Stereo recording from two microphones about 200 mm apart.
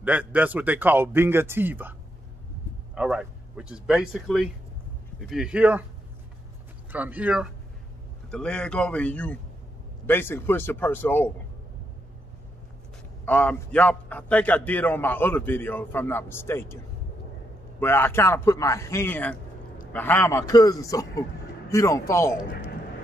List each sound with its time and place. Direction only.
0.0 s speech: 5° right (ahead or behind)
6.9 s speech: 10° right (ahead or behind)
8.3 s a man's voice: 5° left (ahead or behind)
13.2 s a man's voice: 10° left (ahead or behind)